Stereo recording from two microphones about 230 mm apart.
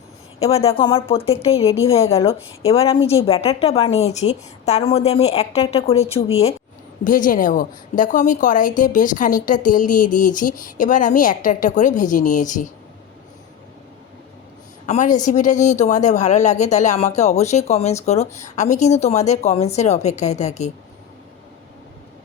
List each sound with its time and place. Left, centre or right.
0.3 s a woman's voice: left
14.8 s a woman's voice: left